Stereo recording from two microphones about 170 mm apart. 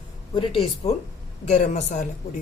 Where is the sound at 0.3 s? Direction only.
30° left (ahead or behind).